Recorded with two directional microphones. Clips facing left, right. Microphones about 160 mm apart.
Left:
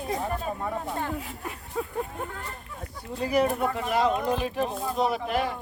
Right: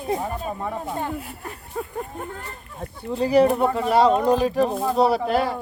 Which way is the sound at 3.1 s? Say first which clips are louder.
Right 7 dB; 30° right (ahead or behind).